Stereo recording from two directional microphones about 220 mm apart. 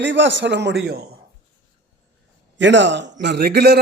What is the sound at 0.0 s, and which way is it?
A man's voice, 55° right (ahead or behind).